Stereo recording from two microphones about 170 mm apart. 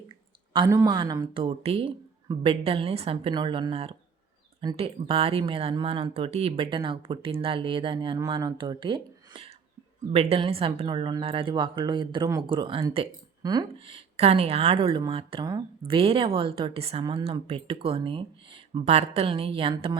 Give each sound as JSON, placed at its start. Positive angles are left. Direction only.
{"t": 0.5, "sound": "a woman's voice", "side_deg": -20}
{"t": 13.7, "sound": "speech", "side_deg": -35}
{"t": 17.2, "sound": "speech", "side_deg": -35}